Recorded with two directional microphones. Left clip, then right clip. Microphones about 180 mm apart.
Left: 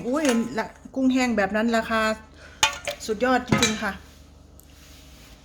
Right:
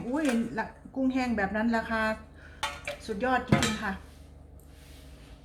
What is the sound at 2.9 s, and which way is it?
Cutlery, 55° left (ahead or behind).